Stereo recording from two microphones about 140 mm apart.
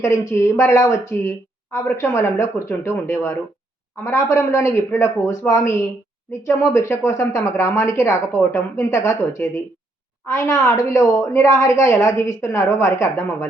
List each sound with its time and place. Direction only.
0.0 s a woman's voice: 20° left (ahead or behind)